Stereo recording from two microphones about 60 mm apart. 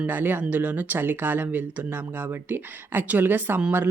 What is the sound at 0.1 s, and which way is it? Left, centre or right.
Speech, right.